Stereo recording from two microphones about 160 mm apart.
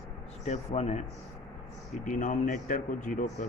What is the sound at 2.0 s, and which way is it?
A man's voice, 50° left (ahead or behind).